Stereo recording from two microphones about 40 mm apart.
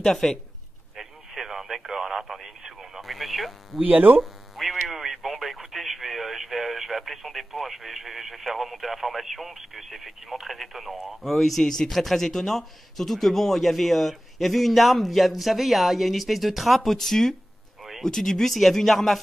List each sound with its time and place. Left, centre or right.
0.0 s speech: centre
0.9 s radio: centre
3.8 s speech: right
4.2 s radio: centre
11.6 s speech: centre
18.5 s speech: centre